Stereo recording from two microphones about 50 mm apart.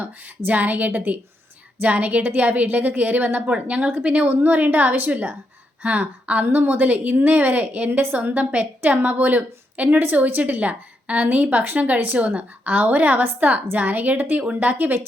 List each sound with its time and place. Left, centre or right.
0.0 s a woman's voice: right
6.4 s a woman's voice: right